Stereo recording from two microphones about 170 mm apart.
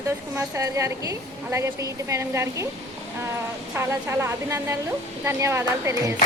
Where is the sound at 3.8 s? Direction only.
15° right (ahead or behind).